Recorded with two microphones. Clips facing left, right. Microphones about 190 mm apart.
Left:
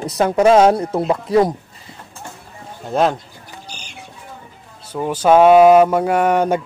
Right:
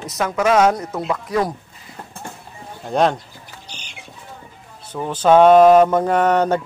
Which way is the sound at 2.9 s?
Centre (ahead or behind).